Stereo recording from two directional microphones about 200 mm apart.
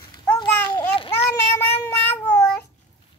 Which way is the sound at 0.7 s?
30° left (ahead or behind).